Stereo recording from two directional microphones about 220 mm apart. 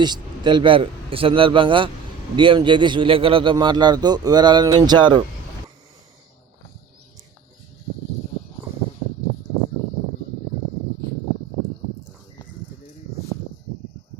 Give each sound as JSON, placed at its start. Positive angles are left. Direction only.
{"t": 0.0, "sound": "a man's voice", "side_deg": -20}